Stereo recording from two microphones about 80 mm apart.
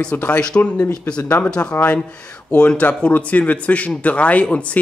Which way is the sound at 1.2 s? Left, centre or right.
Left.